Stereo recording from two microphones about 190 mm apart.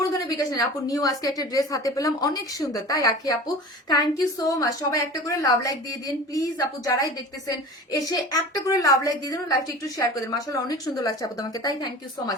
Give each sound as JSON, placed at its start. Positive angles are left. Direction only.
{"t": 0.3, "sound": "a woman's voice", "side_deg": 20}